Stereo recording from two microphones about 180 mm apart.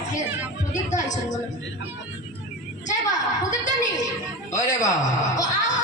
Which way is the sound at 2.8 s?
45° left (ahead or behind).